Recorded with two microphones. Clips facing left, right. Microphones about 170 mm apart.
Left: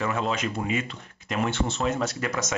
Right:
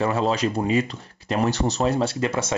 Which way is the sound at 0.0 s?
35° right (ahead or behind).